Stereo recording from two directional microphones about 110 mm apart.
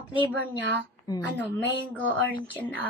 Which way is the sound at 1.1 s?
35° left (ahead or behind).